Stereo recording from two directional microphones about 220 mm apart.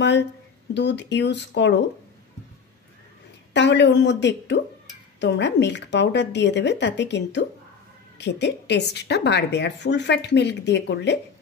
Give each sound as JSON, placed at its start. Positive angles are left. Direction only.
{"t": 0.0, "sound": "a woman's voice", "side_deg": 50}
{"t": 3.5, "sound": "a woman's voice", "side_deg": 50}